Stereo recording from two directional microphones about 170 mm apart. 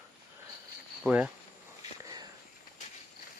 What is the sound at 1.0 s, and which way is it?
Speech, 5° right (ahead or behind).